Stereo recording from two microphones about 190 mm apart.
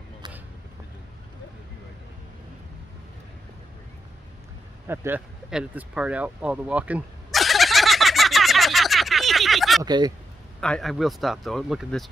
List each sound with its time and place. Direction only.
4.8 s a sound: 10° right (ahead or behind)
9.8 s speech: 20° right (ahead or behind)
10.6 s speech: centre (ahead or behind)